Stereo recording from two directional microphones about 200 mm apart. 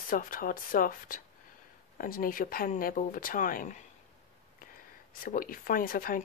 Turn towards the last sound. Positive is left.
turn(degrees=45)  # may be behind; listen again after turning